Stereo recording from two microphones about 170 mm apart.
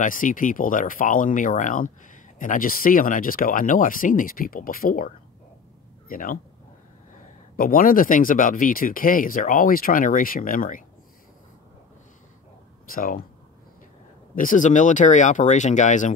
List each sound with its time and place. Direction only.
0.0 s a man's voice: 50° left (ahead or behind)
7.5 s speech: 55° left (ahead or behind)
12.9 s speech: 55° left (ahead or behind)
14.3 s speech: 55° left (ahead or behind)